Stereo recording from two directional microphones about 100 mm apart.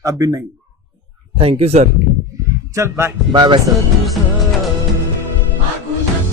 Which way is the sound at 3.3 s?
50° right (ahead or behind).